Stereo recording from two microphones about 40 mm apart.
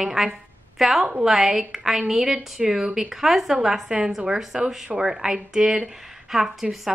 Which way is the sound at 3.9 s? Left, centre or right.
Right.